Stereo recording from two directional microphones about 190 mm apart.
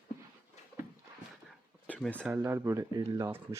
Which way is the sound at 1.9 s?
5° left (ahead or behind).